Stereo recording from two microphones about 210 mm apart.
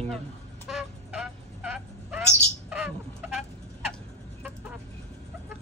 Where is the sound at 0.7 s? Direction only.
5° right (ahead or behind).